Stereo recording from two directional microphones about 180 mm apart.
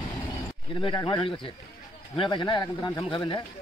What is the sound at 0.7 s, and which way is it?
A man's voice, 25° left (ahead or behind).